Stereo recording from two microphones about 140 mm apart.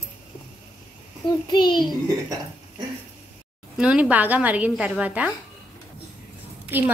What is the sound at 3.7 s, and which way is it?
A woman's voice, 10° right (ahead or behind).